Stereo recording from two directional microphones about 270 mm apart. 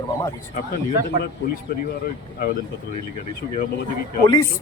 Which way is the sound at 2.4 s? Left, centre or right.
Left.